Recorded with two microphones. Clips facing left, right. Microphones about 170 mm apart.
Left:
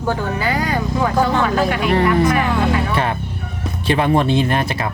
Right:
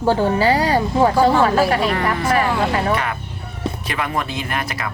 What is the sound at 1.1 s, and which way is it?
Speech, 10° right (ahead or behind).